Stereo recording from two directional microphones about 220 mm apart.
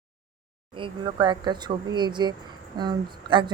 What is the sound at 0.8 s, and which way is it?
Speech, 20° right (ahead or behind).